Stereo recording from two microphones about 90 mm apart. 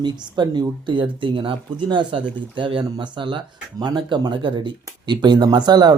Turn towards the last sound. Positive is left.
turn(degrees=-50)  # may be behind; listen again after turning